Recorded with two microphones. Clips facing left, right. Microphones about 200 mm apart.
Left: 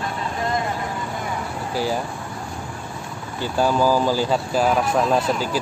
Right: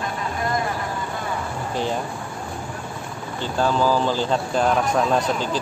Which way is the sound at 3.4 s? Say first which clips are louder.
Left 2 dB; 10° left (ahead or behind).